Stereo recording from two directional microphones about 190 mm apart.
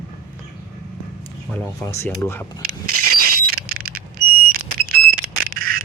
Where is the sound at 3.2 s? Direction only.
50° right (ahead or behind).